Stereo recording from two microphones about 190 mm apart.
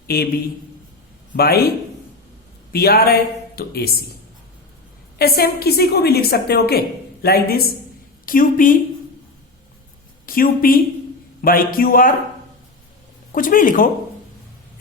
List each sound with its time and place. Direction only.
0.1 s a man's voice: 55° left (ahead or behind)
1.3 s a woman's voice: 55° left (ahead or behind)
2.7 s a woman's voice: 55° left (ahead or behind)
5.1 s a woman's voice: 55° left (ahead or behind)
10.2 s a woman's voice: 50° left (ahead or behind)
13.3 s a man's voice: 45° left (ahead or behind)